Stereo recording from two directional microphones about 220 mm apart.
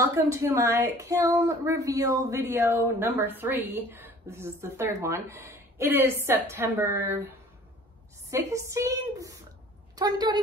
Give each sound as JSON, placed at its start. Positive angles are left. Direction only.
{"t": 0.0, "sound": "a woman's voice", "side_deg": -15}